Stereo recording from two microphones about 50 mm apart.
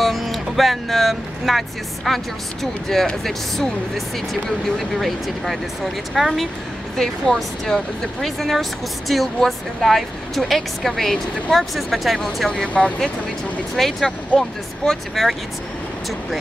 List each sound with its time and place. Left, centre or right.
0.0 s music: centre
2.0 s speech: centre
4.3 s speech: centre
12.4 s speech: centre
13.7 s speech: centre
14.3 s speech: left
14.9 s speech: centre